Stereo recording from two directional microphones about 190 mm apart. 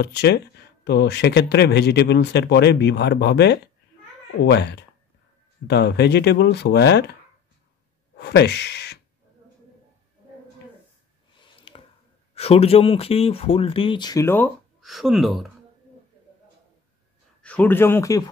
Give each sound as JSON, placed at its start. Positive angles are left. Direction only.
{"t": 0.0, "sound": "speech", "side_deg": 60}
{"t": 8.2, "sound": "speech", "side_deg": 60}
{"t": 11.3, "sound": "a sound", "side_deg": 30}
{"t": 12.4, "sound": "speech", "side_deg": 30}
{"t": 14.8, "sound": "speech", "side_deg": 0}
{"t": 17.4, "sound": "speech", "side_deg": 10}